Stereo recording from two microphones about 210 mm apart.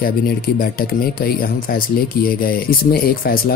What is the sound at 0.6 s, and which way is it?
Speech, 45° left (ahead or behind).